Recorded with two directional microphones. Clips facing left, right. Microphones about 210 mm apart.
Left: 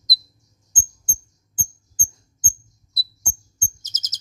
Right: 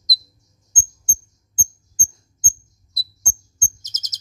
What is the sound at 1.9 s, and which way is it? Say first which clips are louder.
Mouse: left 1 dB; 5° left (ahead or behind).